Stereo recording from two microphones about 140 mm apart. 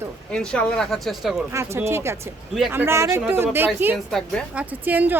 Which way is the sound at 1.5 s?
20° right (ahead or behind).